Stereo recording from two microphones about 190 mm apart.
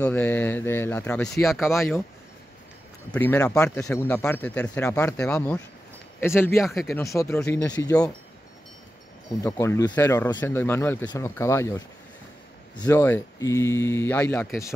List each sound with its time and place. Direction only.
0.0 s speech: 10° left (ahead or behind)
3.1 s speech: 10° left (ahead or behind)
6.6 s speech: centre (ahead or behind)
7.0 s speech: 15° left (ahead or behind)
9.4 s speech: 15° left (ahead or behind)